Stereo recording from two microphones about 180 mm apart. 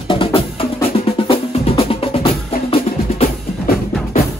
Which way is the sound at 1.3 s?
30° left (ahead or behind).